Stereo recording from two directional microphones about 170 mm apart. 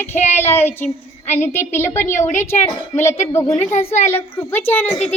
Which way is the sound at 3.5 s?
40° left (ahead or behind).